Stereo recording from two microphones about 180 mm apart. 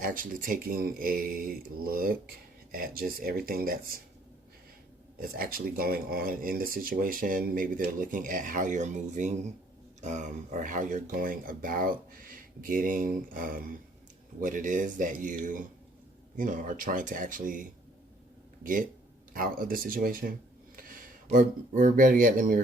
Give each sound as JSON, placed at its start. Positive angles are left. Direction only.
{"t": 0.0, "sound": "speech", "side_deg": -50}
{"t": 5.2, "sound": "speech", "side_deg": -55}